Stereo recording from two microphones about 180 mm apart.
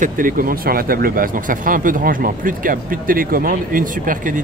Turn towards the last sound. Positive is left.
turn(degrees=-50)  # may be behind; listen again after turning